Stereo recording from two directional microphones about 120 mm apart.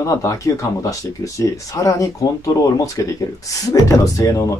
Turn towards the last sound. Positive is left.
turn(degrees=25)  # may be behind; listen again after turning